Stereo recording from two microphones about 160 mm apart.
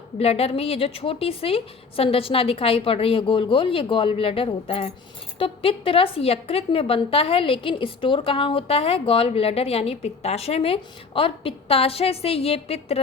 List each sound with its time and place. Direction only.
0.2 s a woman's voice: 40° left (ahead or behind)